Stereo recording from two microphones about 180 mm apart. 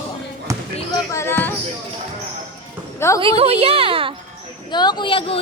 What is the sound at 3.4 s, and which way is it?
Speech, 35° right (ahead or behind).